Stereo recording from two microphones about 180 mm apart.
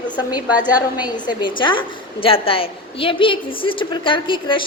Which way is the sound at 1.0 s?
25° left (ahead or behind).